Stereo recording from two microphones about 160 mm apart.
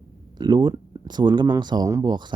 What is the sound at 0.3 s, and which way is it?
Speech, 25° right (ahead or behind).